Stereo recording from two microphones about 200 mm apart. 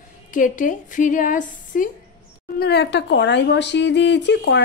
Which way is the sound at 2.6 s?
55° left (ahead or behind).